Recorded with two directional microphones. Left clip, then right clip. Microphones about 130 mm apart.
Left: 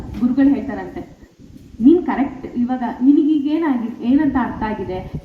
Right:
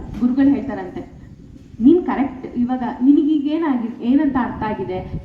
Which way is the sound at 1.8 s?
20° left (ahead or behind).